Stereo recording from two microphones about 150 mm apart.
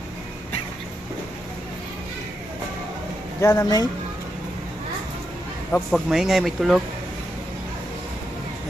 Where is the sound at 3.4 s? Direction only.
25° left (ahead or behind).